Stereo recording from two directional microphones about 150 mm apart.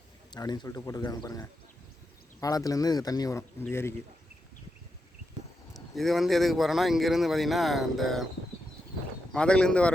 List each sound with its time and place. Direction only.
0.3 s speech: 30° left (ahead or behind)
5.7 s speech: centre (ahead or behind)
9.3 s speech: 5° left (ahead or behind)